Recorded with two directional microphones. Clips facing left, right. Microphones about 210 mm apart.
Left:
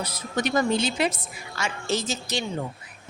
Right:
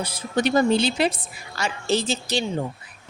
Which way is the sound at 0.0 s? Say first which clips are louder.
Right 4 dB; 30° right (ahead or behind).